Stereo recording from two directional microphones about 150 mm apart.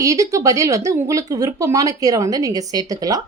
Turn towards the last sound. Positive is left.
turn(degrees=-25)  # may be behind; listen again after turning